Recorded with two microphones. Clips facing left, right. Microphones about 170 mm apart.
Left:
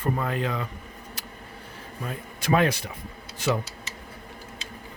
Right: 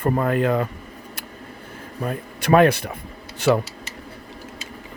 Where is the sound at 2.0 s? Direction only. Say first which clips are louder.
Right 7 dB; 55° right (ahead or behind).